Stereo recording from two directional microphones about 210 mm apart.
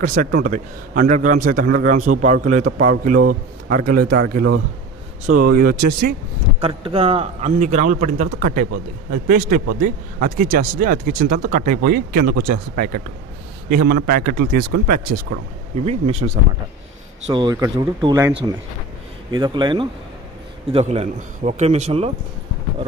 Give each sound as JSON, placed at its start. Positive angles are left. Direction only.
{"t": 0.0, "sound": "a man's voice", "side_deg": -40}
{"t": 6.6, "sound": "a man's voice", "side_deg": -25}
{"t": 15.7, "sound": "a man's voice", "side_deg": -30}
{"t": 17.3, "sound": "speech", "side_deg": -20}
{"t": 19.3, "sound": "a man's voice", "side_deg": -20}